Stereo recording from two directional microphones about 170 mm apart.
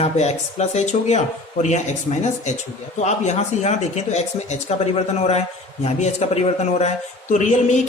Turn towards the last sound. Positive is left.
turn(degrees=45)  # may be behind; listen again after turning